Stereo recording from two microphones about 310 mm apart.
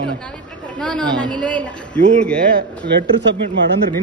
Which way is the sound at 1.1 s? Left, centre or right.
Centre.